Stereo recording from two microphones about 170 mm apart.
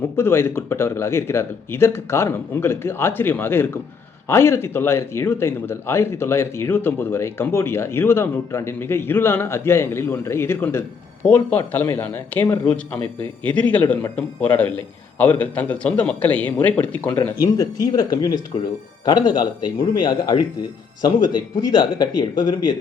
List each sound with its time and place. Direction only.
0.2 s speech: 15° left (ahead or behind)
17.4 s speech: 20° left (ahead or behind)
21.8 s speech: 25° left (ahead or behind)